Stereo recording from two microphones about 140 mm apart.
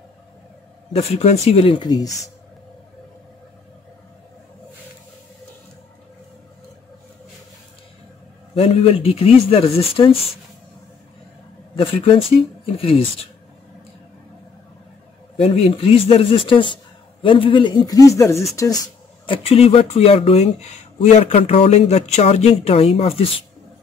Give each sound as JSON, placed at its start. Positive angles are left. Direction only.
{"t": 0.9, "sound": "speech", "side_deg": 45}
{"t": 8.5, "sound": "speech", "side_deg": 45}
{"t": 11.7, "sound": "speech", "side_deg": 40}
{"t": 15.3, "sound": "speech", "side_deg": 45}
{"t": 19.2, "sound": "speech", "side_deg": 40}